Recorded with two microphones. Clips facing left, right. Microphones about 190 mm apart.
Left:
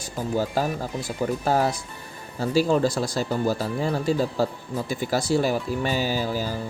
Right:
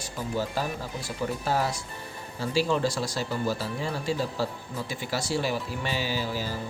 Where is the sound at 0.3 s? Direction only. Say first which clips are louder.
Left 5 dB; 45° left (ahead or behind).